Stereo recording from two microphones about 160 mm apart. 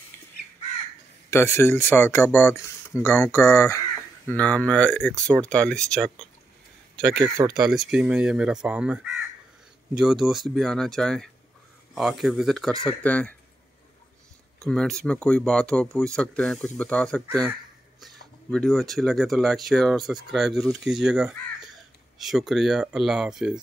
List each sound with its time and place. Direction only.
1.3 s speech: 15° left (ahead or behind)
7.2 s speech: 20° right (ahead or behind)
7.5 s speech: 5° right (ahead or behind)
14.6 s speech: 5° left (ahead or behind)